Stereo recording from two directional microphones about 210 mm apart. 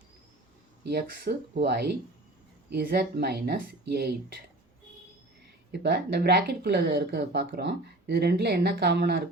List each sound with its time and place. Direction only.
0.9 s speech: 50° right (ahead or behind)
5.8 s speech: 50° right (ahead or behind)